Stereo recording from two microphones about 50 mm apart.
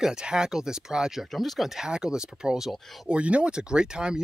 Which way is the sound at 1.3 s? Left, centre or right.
Centre.